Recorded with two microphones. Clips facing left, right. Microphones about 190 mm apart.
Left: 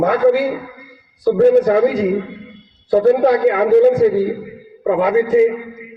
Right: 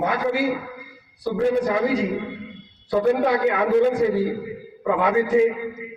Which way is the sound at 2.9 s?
45° left (ahead or behind).